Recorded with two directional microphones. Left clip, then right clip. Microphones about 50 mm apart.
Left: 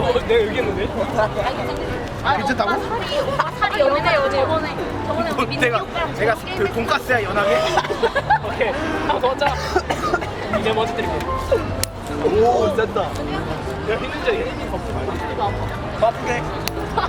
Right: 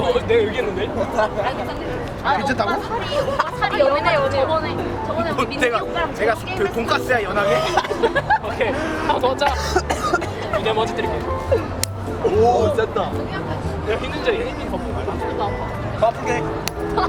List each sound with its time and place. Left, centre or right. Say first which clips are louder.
0.0 s speech: even; centre
2.2 s speech: even; centre
3.7 s speech: right 1 dB; centre
5.2 s speech: even; centre
8.0 s speech: even; centre
8.5 s speech: even; centre
9.7 s cough: even; right
10.6 s speech: even; centre
12.5 s speech: even; centre
16.0 s speech: even; centre